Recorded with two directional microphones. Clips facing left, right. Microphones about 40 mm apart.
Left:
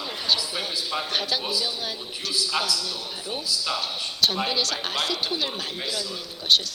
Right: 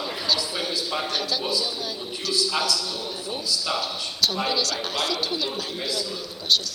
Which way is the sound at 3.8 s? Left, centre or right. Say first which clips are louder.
Even; left.